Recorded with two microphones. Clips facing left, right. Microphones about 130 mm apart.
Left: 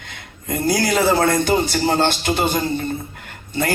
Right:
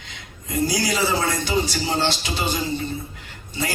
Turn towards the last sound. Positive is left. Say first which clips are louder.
# left 6 dB
turn(degrees=55)  # may be behind; listen again after turning